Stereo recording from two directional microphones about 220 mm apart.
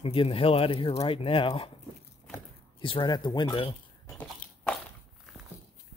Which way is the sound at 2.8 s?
20° left (ahead or behind).